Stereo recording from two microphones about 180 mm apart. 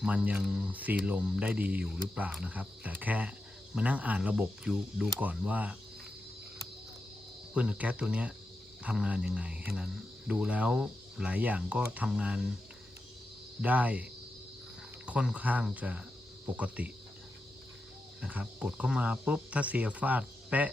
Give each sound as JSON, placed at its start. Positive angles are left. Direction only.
{"t": 0.0, "sound": "speech", "side_deg": -5}
{"t": 7.5, "sound": "speech", "side_deg": -5}
{"t": 13.6, "sound": "speech", "side_deg": -10}
{"t": 18.2, "sound": "speech", "side_deg": -5}